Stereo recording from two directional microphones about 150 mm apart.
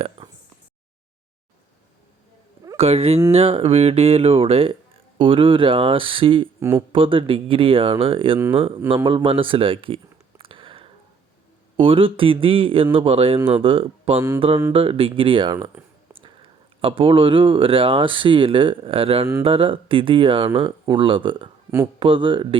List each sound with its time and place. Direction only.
0.2 s a sound: 40° right (ahead or behind)
2.7 s speech: 45° right (ahead or behind)
6.6 s speech: 15° right (ahead or behind)
6.9 s speech: 35° right (ahead or behind)
9.0 s a sound: 35° right (ahead or behind)
11.8 s speech: 35° right (ahead or behind)